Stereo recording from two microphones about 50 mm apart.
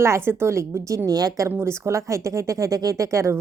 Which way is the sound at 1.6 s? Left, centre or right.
Right.